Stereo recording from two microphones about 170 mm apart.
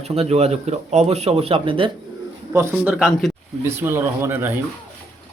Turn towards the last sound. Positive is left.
turn(degrees=-15)  # may be behind; listen again after turning